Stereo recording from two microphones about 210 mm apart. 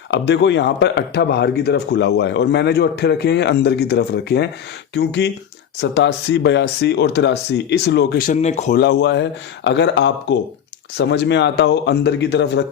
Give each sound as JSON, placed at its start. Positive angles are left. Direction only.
{"t": 0.1, "sound": "speech", "side_deg": 55}
{"t": 8.3, "sound": "speech", "side_deg": 35}
{"t": 8.7, "sound": "speech", "side_deg": 55}